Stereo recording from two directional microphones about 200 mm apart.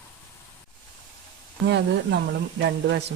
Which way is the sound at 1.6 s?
60° right (ahead or behind).